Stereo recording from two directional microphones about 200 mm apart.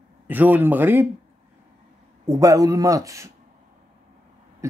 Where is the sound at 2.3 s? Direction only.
15° right (ahead or behind).